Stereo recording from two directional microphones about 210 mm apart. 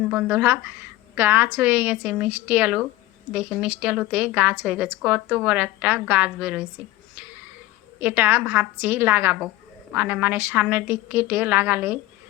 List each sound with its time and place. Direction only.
0.1 s a woman's voice: 10° right (ahead or behind)
8.0 s a woman's voice: 10° right (ahead or behind)